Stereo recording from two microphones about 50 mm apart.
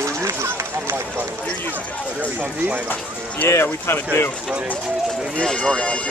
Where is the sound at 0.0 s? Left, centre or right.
Right.